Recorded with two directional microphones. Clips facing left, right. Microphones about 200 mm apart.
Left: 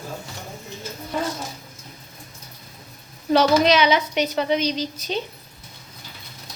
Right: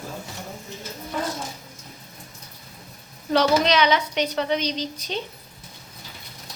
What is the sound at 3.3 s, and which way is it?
A child's voice, 10° left (ahead or behind).